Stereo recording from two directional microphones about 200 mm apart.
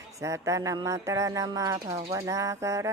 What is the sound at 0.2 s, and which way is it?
Speech, 15° right (ahead or behind).